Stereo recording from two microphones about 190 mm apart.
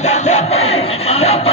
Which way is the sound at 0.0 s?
35° left (ahead or behind).